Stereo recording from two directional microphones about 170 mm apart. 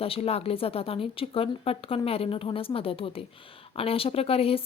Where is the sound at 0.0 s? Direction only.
35° left (ahead or behind).